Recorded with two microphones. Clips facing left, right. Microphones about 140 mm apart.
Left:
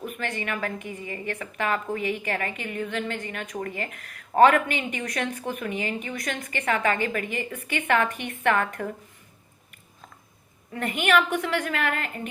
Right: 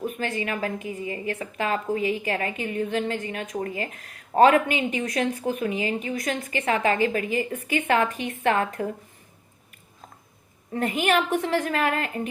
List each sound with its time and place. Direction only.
0.0 s a woman's voice: 35° right (ahead or behind)
10.8 s a woman's voice: 35° right (ahead or behind)